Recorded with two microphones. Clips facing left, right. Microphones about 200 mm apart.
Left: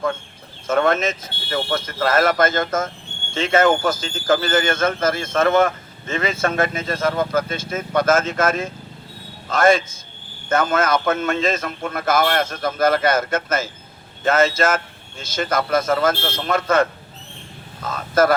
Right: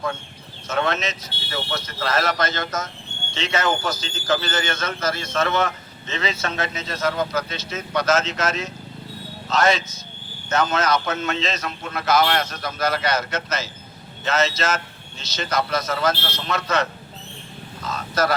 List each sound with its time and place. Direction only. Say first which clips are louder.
0.7 s speech: left 6 dB; 50° left (ahead or behind)